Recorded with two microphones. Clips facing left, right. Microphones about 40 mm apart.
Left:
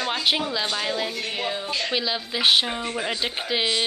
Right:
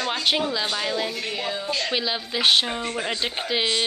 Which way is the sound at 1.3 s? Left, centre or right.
Left.